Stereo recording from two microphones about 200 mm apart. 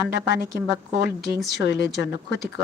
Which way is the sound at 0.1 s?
60° left (ahead or behind).